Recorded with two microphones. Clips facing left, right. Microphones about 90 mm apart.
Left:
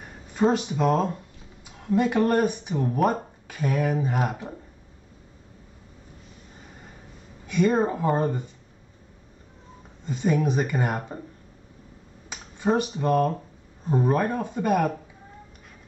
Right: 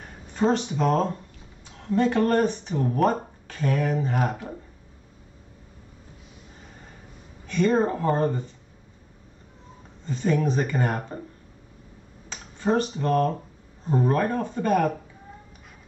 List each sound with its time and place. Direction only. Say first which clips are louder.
0.0 s speech: left 1 dB; 10° left (ahead or behind)
7.4 s speech: even; 10° left (ahead or behind)
10.0 s speech: even; 10° left (ahead or behind)
12.3 s speech: even; 10° left (ahead or behind)